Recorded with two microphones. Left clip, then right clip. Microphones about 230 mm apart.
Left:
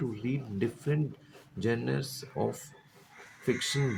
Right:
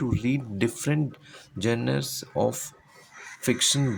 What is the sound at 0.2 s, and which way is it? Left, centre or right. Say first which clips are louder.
Speech: right 6 dB; right.